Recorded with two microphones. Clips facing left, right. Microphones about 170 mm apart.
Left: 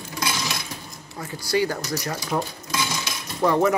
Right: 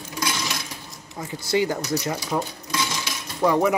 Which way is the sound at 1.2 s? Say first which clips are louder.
Even; 20° right (ahead or behind).